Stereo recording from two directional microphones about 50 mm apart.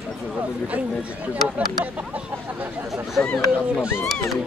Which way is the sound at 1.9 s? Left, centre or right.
Right.